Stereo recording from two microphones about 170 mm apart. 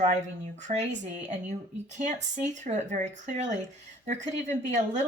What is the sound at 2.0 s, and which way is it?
Speech, 45° right (ahead or behind).